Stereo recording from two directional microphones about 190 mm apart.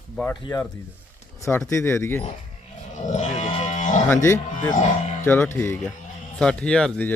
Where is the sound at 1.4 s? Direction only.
15° left (ahead or behind).